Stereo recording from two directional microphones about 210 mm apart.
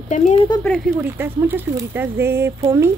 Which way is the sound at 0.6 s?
5° left (ahead or behind).